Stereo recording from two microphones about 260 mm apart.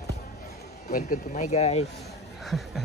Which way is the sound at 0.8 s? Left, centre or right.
Left.